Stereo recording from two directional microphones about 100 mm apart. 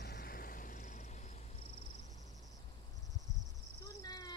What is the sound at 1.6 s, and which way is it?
Cricket, 70° left (ahead or behind).